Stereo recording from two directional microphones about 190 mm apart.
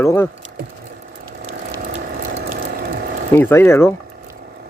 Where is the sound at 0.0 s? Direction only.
15° left (ahead or behind).